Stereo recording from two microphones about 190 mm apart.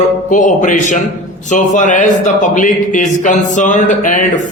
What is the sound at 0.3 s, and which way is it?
A man's voice, 40° left (ahead or behind).